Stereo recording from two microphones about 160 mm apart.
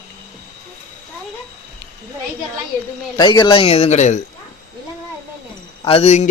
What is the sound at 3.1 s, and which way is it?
Speech, 30° left (ahead or behind).